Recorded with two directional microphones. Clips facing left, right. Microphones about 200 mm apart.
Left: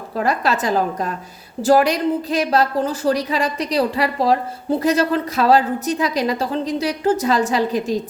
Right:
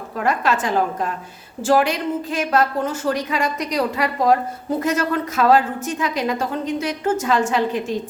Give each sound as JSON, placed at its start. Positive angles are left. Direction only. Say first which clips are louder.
{"t": 0.2, "sound": "a woman's voice", "louder": "left 1 dB", "side_deg": 35}